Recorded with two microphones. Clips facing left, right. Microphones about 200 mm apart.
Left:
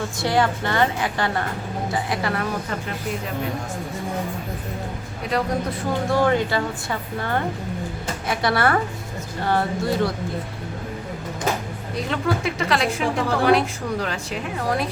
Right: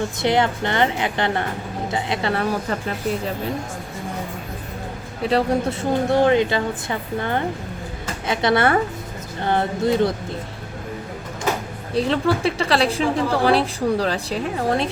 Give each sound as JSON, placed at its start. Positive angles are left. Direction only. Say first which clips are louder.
{"t": 0.2, "sound": "speech", "louder": "right 1 dB", "side_deg": -20}
{"t": 5.3, "sound": "speech", "louder": "right 4 dB", "side_deg": -25}
{"t": 8.3, "sound": "speech", "louder": "right 3 dB", "side_deg": -20}
{"t": 11.9, "sound": "a woman's voice", "louder": "right 5 dB", "side_deg": -30}